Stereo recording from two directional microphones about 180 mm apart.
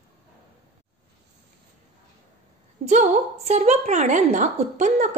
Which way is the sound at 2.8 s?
40° right (ahead or behind).